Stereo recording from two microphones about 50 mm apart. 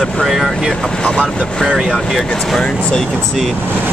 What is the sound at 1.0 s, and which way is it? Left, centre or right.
Speech, centre.